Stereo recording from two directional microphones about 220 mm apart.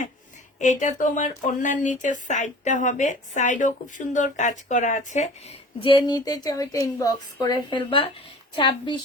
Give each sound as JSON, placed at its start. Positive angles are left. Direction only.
{"t": 0.6, "sound": "a woman's voice", "side_deg": 35}